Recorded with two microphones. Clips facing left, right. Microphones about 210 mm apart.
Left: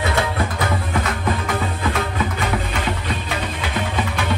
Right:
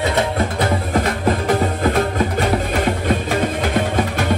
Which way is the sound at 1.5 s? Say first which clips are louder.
Right 6 dB; 45° right (ahead or behind).